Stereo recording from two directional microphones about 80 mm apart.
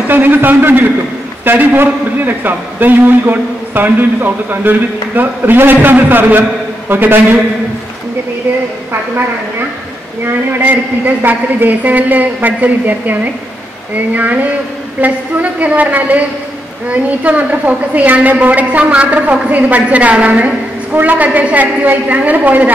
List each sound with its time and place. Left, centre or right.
0.1 s a woman's voice: right
10.2 s a woman's voice: right